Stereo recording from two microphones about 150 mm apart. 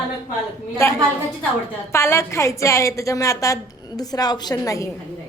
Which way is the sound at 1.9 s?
15° left (ahead or behind).